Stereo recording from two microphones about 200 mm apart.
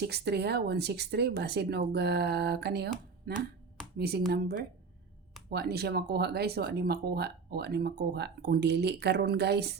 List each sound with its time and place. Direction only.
0.0 s speech: 55° right (ahead or behind)